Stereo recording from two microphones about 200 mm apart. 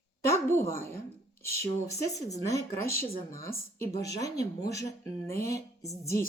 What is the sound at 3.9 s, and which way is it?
Speech, 55° left (ahead or behind).